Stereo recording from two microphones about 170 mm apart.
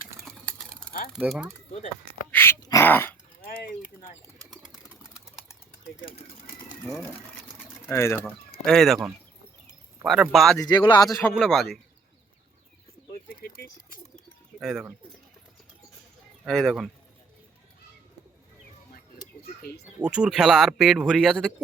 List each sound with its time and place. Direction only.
0.3 s typing: 5° left (ahead or behind)
1.1 s speech: 5° right (ahead or behind)
2.3 s speech: 15° left (ahead or behind)
7.9 s speech: 15° left (ahead or behind)
8.2 s speech: centre (ahead or behind)
10.6 s speech: 25° left (ahead or behind)
11.1 s speech: 5° left (ahead or behind)
14.6 s speech: centre (ahead or behind)
16.4 s speech: centre (ahead or behind)
20.1 s speech: 5° right (ahead or behind)